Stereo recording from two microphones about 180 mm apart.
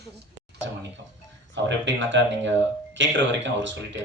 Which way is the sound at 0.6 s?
75° right (ahead or behind).